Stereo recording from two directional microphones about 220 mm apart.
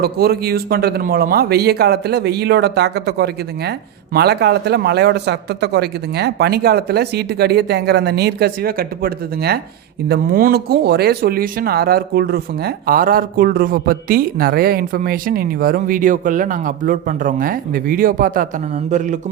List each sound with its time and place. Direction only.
0.0 s speech: 45° right (ahead or behind)